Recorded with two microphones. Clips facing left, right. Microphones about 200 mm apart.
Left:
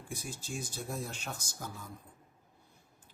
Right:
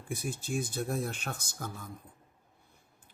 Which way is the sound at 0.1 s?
60° right (ahead or behind).